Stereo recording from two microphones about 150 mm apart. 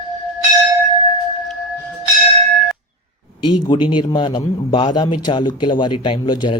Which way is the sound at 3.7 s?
35° left (ahead or behind).